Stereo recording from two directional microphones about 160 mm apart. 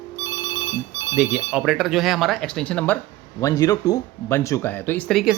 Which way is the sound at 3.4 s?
25° left (ahead or behind).